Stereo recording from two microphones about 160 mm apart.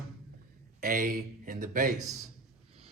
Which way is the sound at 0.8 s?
60° right (ahead or behind).